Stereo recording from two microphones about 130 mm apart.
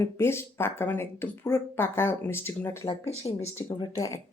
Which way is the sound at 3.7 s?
30° left (ahead or behind).